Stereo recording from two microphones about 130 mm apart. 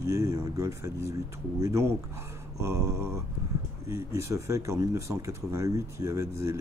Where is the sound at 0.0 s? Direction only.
20° right (ahead or behind).